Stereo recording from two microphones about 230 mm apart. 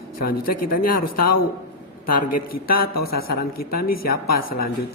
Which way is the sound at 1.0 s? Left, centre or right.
Left.